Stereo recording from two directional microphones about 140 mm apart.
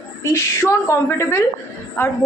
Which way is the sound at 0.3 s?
20° left (ahead or behind).